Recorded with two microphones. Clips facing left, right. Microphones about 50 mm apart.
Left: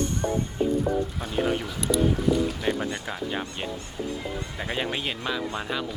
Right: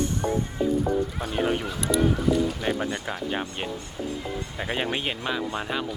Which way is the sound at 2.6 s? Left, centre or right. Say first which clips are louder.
Even; centre.